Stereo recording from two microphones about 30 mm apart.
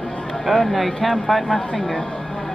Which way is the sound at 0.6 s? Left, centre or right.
Centre.